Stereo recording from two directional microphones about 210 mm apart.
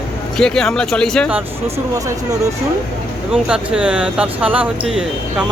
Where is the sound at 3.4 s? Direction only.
5° right (ahead or behind).